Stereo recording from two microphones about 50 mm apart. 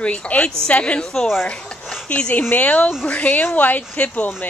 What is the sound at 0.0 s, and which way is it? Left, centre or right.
Speech, left.